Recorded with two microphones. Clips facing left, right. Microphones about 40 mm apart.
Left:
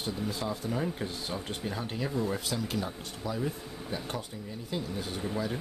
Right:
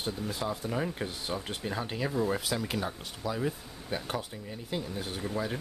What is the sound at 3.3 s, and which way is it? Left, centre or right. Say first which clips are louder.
Speech: right 1 dB; right.